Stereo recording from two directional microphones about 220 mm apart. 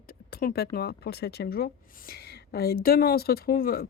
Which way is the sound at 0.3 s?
45° left (ahead or behind).